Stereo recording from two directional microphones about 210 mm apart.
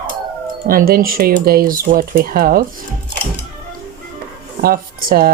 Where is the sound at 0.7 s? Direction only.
45° right (ahead or behind).